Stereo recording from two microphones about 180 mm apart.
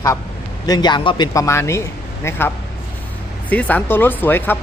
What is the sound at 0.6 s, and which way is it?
Speech, 25° left (ahead or behind).